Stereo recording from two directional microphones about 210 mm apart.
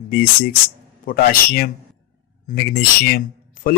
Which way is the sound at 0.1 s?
45° left (ahead or behind).